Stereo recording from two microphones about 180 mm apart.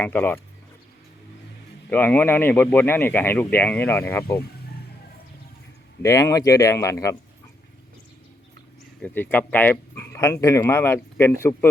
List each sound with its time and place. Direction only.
0.0 s speech: 10° left (ahead or behind)
1.9 s speech: 10° left (ahead or behind)
6.0 s speech: 15° left (ahead or behind)
9.0 s speech: 10° left (ahead or behind)